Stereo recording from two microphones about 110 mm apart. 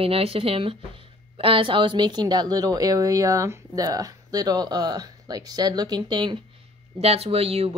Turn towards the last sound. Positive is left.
turn(degrees=-65)  # may be behind; listen again after turning